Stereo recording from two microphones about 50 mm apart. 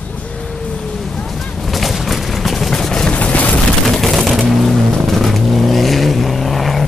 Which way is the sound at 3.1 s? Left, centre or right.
Left.